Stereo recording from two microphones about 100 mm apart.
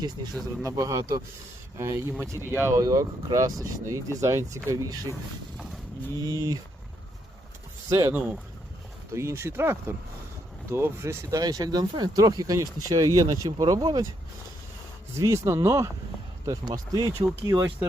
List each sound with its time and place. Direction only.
0.2 s speech: 45° right (ahead or behind)
0.6 s speech: 30° right (ahead or behind)
6.2 s speech: 40° right (ahead or behind)
7.9 s speech: 25° right (ahead or behind)
9.1 s speech: 25° right (ahead or behind)
15.2 s speech: 30° right (ahead or behind)